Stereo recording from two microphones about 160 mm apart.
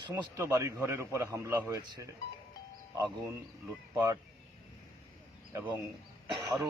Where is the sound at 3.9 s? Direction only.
20° right (ahead or behind).